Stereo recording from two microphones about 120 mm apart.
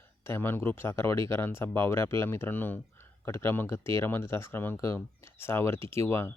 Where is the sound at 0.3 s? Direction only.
20° left (ahead or behind).